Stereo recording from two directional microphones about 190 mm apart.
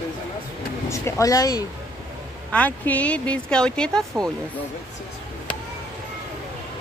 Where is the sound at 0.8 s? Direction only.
15° left (ahead or behind).